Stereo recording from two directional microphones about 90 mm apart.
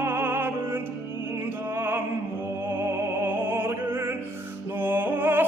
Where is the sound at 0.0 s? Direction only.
25° right (ahead or behind).